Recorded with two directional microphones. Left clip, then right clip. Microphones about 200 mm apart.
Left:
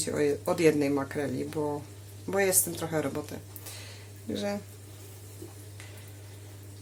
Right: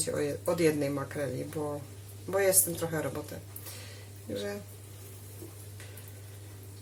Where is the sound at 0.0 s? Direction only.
40° left (ahead or behind).